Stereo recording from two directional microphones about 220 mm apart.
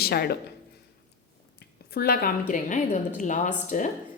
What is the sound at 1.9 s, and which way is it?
Speech, 45° left (ahead or behind).